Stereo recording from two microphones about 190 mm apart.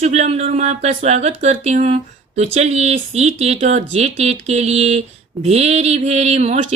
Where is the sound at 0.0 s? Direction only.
35° right (ahead or behind).